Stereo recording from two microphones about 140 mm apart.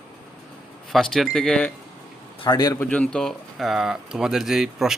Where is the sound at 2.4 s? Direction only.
30° left (ahead or behind).